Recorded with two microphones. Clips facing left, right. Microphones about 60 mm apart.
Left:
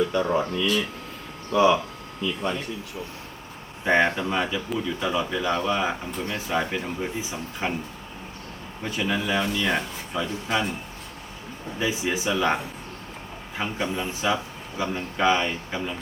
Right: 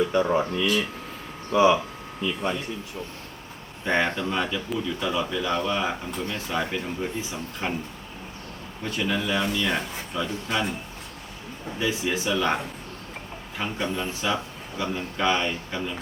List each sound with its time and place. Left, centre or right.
0.0 s speech: centre
0.6 s speech: right
1.5 s speech: centre
3.8 s speech: centre
8.8 s speech: centre
11.8 s speech: centre
13.6 s speech: centre